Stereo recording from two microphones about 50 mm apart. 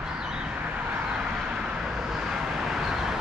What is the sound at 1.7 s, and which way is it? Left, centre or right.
Vehicle, centre.